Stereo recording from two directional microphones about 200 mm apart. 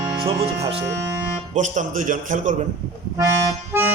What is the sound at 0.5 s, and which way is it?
Speech, 30° right (ahead or behind).